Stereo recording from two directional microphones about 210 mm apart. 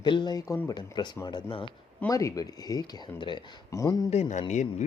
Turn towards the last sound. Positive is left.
turn(degrees=35)  # may be behind; listen again after turning